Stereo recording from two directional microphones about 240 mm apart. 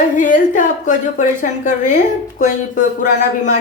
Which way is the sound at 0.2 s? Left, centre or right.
Left.